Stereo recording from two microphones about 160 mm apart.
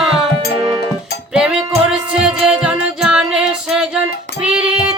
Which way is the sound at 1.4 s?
5° right (ahead or behind).